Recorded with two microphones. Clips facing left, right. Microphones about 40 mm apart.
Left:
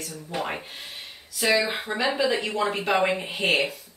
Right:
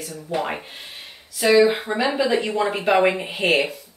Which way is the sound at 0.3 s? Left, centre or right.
Centre.